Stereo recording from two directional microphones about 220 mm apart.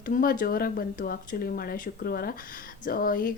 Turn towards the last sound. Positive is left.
turn(degrees=40)  # may be behind; listen again after turning